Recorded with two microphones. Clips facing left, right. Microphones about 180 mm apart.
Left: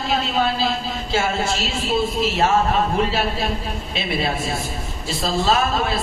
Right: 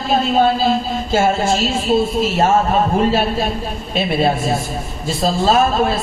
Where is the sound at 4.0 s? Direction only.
45° right (ahead or behind).